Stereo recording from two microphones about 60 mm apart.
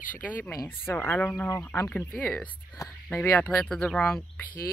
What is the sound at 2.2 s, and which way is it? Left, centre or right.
Speech, left.